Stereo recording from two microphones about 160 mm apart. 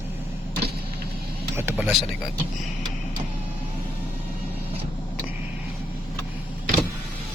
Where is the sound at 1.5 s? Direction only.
15° right (ahead or behind).